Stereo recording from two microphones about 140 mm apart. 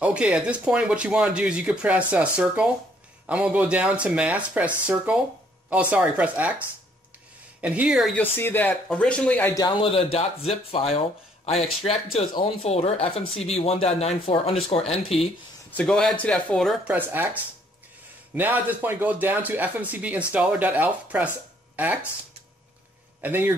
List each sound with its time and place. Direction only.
0.0 s speech: 10° right (ahead or behind)
7.6 s speech: 10° right (ahead or behind)
8.1 s speech: 15° left (ahead or behind)
9.5 s a man's voice: 25° left (ahead or behind)
9.8 s speech: 40° left (ahead or behind)
15.7 s speech: 5° left (ahead or behind)
16.8 s speech: 15° right (ahead or behind)
23.2 s speech: 15° right (ahead or behind)